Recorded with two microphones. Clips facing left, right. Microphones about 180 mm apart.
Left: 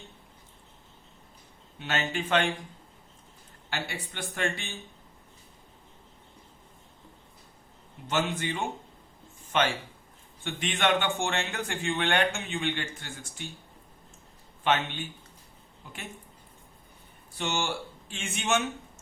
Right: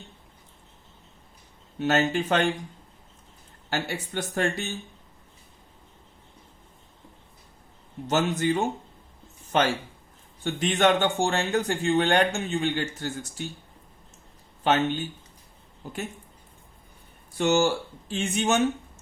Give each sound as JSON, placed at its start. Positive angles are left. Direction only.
{"t": 1.8, "sound": "speech", "side_deg": -40}
{"t": 3.7, "sound": "speech", "side_deg": -45}
{"t": 8.0, "sound": "speech", "side_deg": -40}
{"t": 14.6, "sound": "speech", "side_deg": -40}
{"t": 17.3, "sound": "speech", "side_deg": -45}